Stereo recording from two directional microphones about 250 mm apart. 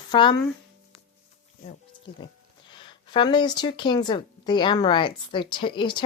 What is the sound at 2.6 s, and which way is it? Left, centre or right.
Speech, centre.